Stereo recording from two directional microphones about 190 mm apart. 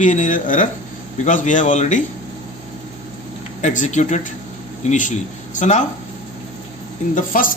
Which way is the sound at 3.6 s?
40° left (ahead or behind).